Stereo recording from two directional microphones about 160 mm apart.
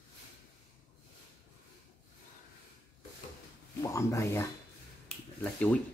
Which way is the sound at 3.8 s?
20° left (ahead or behind).